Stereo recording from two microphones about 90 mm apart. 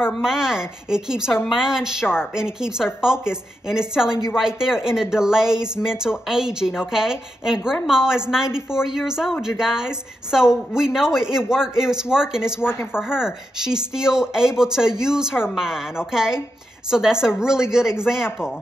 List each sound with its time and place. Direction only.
0.0 s a woman's voice: 5° right (ahead or behind)